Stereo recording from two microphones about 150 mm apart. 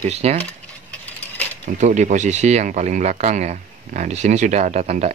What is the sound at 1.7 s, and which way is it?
Speech, 55° right (ahead or behind).